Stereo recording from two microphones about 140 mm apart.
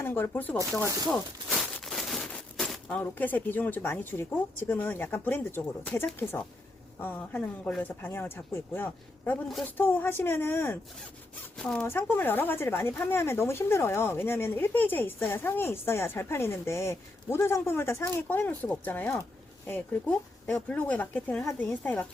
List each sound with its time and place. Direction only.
0.0 s speech: 15° left (ahead or behind)